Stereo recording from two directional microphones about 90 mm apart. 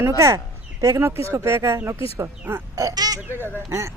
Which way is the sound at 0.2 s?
35° right (ahead or behind).